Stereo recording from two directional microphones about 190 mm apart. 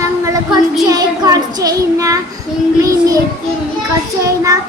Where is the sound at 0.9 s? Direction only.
20° right (ahead or behind).